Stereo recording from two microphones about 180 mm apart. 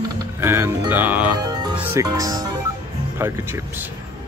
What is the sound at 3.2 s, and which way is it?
Music, 15° right (ahead or behind).